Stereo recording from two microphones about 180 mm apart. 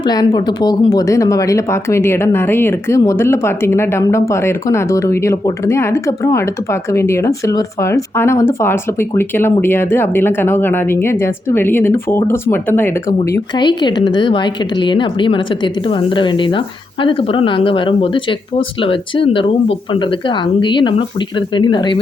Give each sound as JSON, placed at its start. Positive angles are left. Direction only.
{"t": 0.0, "sound": "speech", "side_deg": 20}